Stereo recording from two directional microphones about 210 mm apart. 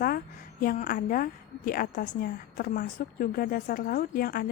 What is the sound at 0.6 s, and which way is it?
A woman's voice, 40° left (ahead or behind).